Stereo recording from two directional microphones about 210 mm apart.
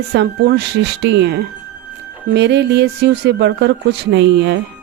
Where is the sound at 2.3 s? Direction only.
55° right (ahead or behind).